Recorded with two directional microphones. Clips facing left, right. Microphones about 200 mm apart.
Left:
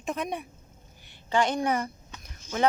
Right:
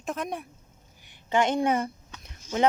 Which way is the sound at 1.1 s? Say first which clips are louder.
Right 1 dB; 20° right (ahead or behind).